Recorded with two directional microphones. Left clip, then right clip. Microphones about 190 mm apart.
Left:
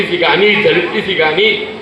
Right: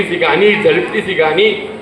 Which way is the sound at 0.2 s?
40° left (ahead or behind).